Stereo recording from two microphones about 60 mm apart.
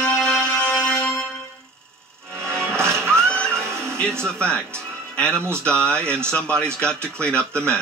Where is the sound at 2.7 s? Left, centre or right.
Right.